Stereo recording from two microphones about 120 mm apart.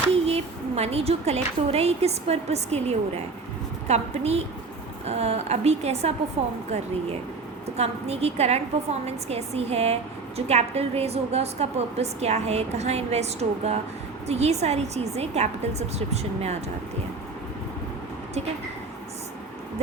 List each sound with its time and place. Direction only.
0.3 s a woman's voice: 60° right (ahead or behind)
7.8 s a woman's voice: 60° right (ahead or behind)